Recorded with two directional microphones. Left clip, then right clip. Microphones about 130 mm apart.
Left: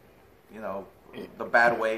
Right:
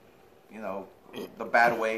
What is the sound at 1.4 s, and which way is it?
Speech, centre (ahead or behind).